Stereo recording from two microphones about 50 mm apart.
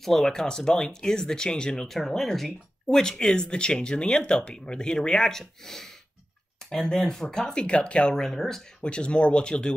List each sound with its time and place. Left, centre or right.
0.0 s speech: centre
1.9 s speech: centre
8.8 s speech: left